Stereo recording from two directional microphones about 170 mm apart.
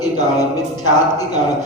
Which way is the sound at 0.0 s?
20° left (ahead or behind).